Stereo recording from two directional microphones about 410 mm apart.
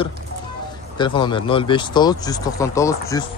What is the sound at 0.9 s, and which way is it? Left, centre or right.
Speech, centre.